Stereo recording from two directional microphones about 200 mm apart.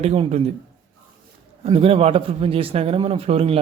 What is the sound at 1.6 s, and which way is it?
Speech, 30° right (ahead or behind).